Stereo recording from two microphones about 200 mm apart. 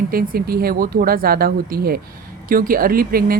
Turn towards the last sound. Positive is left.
turn(degrees=-45)  # may be behind; listen again after turning